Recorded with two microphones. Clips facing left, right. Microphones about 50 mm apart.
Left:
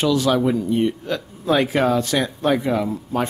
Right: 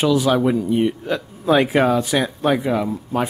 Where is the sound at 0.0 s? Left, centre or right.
Centre.